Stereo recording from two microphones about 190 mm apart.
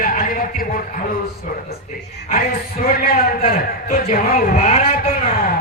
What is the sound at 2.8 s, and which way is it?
A man's voice, 50° left (ahead or behind).